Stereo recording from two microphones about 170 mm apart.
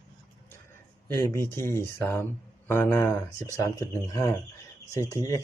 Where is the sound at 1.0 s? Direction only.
15° left (ahead or behind).